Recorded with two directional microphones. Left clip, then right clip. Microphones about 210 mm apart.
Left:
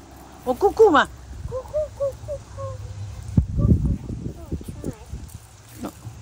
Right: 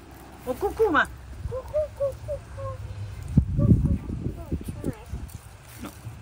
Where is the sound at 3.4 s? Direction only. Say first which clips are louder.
Left 1 dB; centre (ahead or behind).